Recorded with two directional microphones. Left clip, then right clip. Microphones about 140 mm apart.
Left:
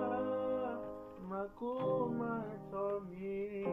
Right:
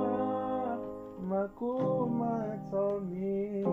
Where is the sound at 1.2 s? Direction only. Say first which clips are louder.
Right 8 dB; 40° right (ahead or behind).